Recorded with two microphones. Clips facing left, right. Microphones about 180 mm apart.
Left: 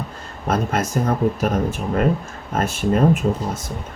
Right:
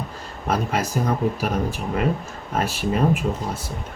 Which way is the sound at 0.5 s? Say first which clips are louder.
Left 2 dB; 10° right (ahead or behind).